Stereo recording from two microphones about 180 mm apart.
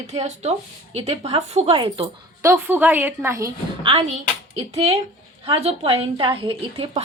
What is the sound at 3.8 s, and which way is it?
A woman's voice, 30° right (ahead or behind).